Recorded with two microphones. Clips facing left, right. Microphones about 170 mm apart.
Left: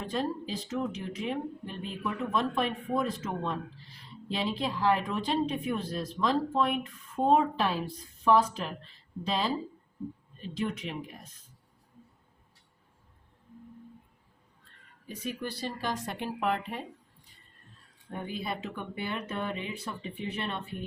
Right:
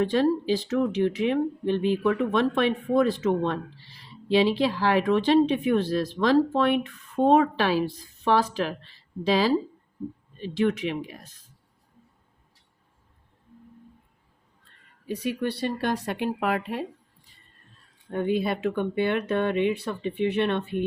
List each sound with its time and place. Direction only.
0.0 s speech: 80° right
15.0 s speech: 75° right (ahead or behind)
18.1 s speech: 70° right (ahead or behind)